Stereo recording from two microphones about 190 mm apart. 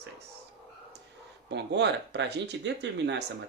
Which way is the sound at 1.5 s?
65° right (ahead or behind).